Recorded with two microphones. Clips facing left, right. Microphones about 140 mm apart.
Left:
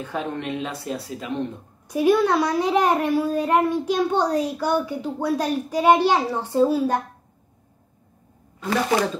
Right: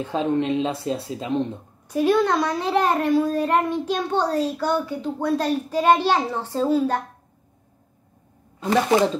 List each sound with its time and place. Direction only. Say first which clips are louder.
0.0 s speech: right 6 dB; 25° right (ahead or behind)
1.9 s a child's voice: left 1 dB; 10° left (ahead or behind)
8.5 s speech: right 3 dB; 20° right (ahead or behind)